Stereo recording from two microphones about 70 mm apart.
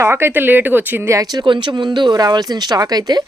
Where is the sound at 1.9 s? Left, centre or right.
Right.